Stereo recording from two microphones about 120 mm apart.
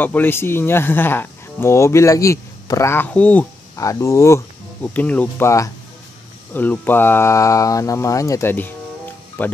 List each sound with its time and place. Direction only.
0.0 s speech: 15° left (ahead or behind)
3.7 s speech: 25° left (ahead or behind)
4.8 s speech: 10° left (ahead or behind)
6.5 s speech: 15° left (ahead or behind)